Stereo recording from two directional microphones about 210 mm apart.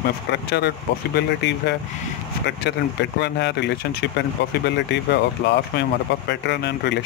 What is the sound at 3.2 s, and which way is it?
Speech, 55° left (ahead or behind).